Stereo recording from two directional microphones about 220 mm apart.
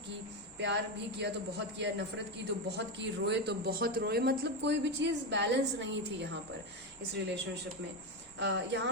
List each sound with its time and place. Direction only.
0.6 s speech: 50° right (ahead or behind)
8.4 s speech: 55° right (ahead or behind)